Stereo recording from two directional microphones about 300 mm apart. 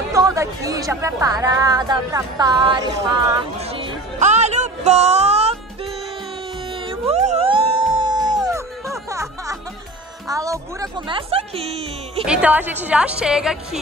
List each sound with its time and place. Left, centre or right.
0.1 s a woman's voice: centre
6.9 s music: right
10.2 s a woman's voice: centre
12.3 s a woman's voice: centre